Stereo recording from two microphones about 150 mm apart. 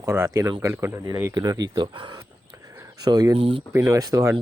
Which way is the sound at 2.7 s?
25° right (ahead or behind).